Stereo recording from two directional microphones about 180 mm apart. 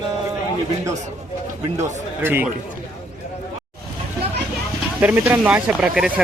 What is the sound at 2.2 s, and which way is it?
Speech, 10° right (ahead or behind).